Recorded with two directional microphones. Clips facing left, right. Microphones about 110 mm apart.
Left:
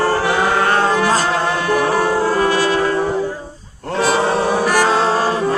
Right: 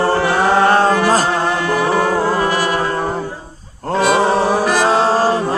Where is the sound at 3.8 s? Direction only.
40° right (ahead or behind).